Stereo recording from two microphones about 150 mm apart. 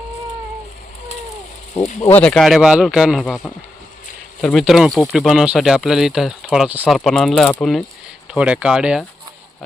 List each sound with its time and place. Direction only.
1.8 s speech: 50° left (ahead or behind)
2.1 s speech: 5° left (ahead or behind)
8.3 s speech: 5° right (ahead or behind)